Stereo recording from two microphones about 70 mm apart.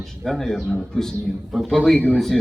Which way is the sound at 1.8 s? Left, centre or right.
Centre.